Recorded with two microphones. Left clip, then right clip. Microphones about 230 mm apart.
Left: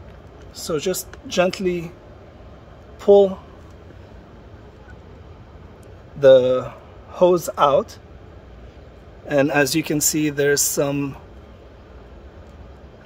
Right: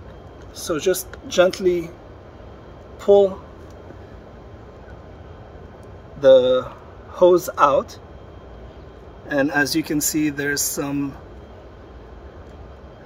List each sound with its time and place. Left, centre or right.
0.7 s speech: left
3.0 s speech: left
6.2 s speech: left
9.3 s speech: left